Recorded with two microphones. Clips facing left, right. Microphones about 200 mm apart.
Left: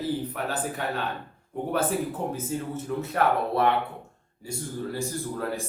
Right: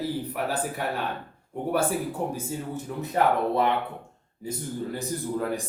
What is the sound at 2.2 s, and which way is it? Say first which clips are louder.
A man's voice: left 1 dB; 15° right (ahead or behind).